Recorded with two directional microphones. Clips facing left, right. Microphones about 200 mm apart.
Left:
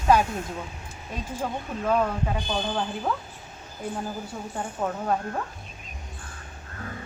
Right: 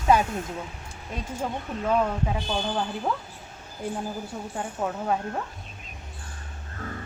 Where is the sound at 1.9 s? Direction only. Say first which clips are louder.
Even; centre (ahead or behind).